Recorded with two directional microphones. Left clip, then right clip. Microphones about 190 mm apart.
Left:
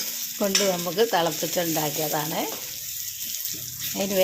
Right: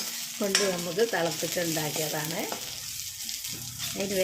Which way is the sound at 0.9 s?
15° left (ahead or behind).